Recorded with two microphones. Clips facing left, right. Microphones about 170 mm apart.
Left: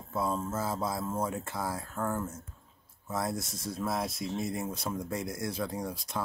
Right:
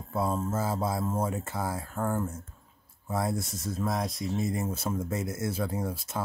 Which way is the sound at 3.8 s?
5° left (ahead or behind).